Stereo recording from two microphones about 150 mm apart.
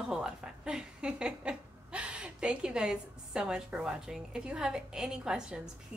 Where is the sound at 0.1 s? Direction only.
5° right (ahead or behind).